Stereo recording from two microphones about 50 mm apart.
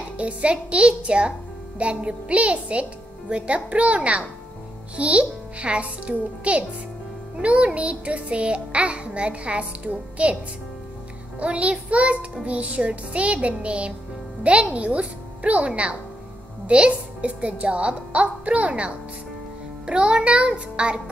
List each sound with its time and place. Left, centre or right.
0.2 s music: right
11.3 s music: right
19.9 s music: centre